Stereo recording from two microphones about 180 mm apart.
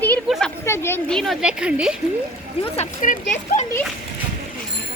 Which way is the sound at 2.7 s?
45° left (ahead or behind).